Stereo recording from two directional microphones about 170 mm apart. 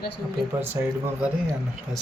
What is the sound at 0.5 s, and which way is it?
Speech, 15° right (ahead or behind).